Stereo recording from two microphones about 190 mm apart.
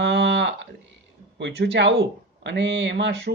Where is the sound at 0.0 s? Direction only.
65° right (ahead or behind).